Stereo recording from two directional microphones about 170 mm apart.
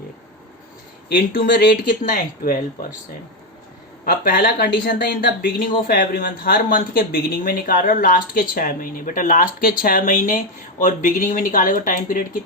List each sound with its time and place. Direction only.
1.5 s speech: 80° left
2.0 s speech: 60° left (ahead or behind)
4.0 s speech: 60° left (ahead or behind)
4.9 s speech: 75° left (ahead or behind)
5.9 s speech: 60° left (ahead or behind)